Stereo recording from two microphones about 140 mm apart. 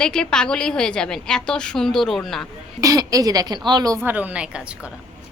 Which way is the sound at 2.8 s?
25° right (ahead or behind).